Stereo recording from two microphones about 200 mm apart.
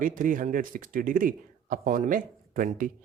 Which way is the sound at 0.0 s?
40° right (ahead or behind).